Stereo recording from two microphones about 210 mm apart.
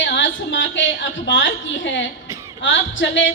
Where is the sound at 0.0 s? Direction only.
60° left (ahead or behind).